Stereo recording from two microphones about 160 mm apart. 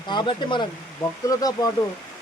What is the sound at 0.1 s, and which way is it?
Speech, 30° left (ahead or behind).